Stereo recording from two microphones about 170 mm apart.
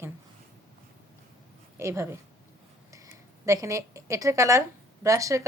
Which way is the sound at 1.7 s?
15° right (ahead or behind).